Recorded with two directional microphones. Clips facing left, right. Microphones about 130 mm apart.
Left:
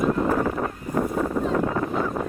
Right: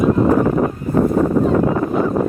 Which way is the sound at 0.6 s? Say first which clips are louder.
Right 9 dB; 40° right (ahead or behind).